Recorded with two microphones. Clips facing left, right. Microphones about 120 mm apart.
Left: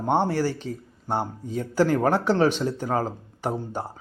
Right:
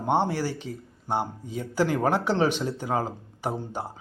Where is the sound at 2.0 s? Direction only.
15° right (ahead or behind).